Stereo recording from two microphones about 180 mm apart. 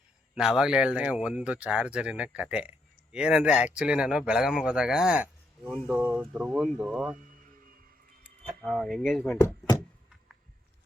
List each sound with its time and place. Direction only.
0.3 s speech: 5° right (ahead or behind)
8.6 s speech: centre (ahead or behind)